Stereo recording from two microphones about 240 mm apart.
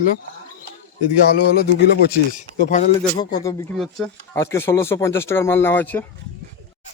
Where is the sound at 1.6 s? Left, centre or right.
Left.